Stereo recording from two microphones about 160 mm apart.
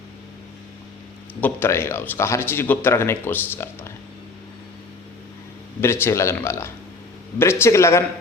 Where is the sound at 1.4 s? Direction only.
15° left (ahead or behind).